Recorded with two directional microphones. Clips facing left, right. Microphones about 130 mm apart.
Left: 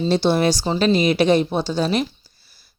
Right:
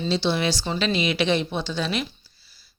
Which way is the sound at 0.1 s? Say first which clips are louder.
Left 6 dB; 45° left (ahead or behind).